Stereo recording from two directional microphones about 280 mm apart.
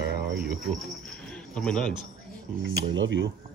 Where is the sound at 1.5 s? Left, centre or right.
Centre.